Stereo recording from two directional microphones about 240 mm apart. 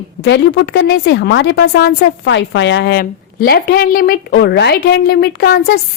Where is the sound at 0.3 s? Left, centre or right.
Left.